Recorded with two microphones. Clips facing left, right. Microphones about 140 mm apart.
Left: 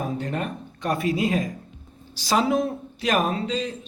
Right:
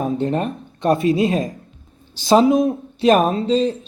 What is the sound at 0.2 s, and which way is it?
A man's voice, 25° right (ahead or behind).